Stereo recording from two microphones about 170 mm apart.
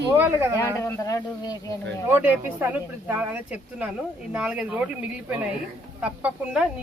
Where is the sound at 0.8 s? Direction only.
15° left (ahead or behind).